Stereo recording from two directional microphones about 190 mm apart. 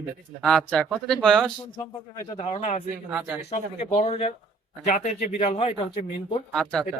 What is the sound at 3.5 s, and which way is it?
Speech, 35° left (ahead or behind).